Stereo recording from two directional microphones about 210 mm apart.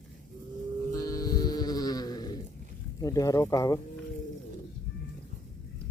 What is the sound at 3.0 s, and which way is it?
Speech, 15° left (ahead or behind).